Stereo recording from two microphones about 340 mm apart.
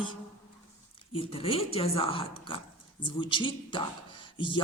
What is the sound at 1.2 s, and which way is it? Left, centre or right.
A woman's voice, centre.